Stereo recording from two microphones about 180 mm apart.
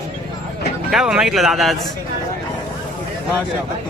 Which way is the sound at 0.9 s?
5° right (ahead or behind).